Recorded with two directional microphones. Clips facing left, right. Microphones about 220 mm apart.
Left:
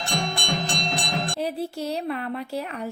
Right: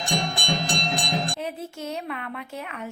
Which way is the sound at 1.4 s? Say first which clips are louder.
Left 5 dB; 35° left (ahead or behind).